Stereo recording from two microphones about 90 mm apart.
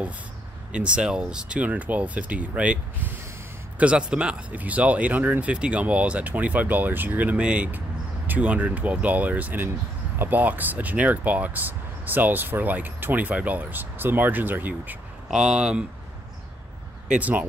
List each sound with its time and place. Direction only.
0.7 s speech: 15° right (ahead or behind)
15.2 s speech: 5° right (ahead or behind)
17.2 s speech: 15° right (ahead or behind)